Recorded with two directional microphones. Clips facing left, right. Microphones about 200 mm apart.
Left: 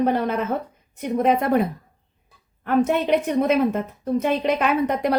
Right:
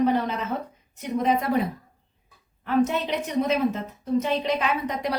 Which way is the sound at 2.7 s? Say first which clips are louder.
Left 4 dB; 55° left (ahead or behind).